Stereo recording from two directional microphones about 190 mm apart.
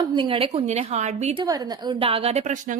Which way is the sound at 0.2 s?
30° right (ahead or behind).